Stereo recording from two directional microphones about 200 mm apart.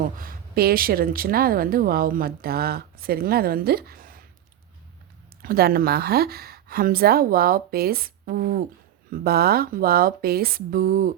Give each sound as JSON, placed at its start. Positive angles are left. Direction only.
{"t": 0.0, "sound": "a woman's voice", "side_deg": -45}
{"t": 5.4, "sound": "a woman's voice", "side_deg": -50}